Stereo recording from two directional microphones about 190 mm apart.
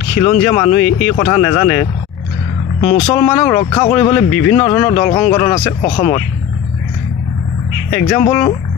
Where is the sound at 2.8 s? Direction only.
25° left (ahead or behind).